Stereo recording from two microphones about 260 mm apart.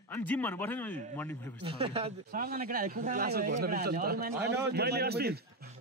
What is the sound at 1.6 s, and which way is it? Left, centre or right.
Speech, right.